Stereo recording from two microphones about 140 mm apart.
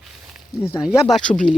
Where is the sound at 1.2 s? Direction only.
65° left (ahead or behind).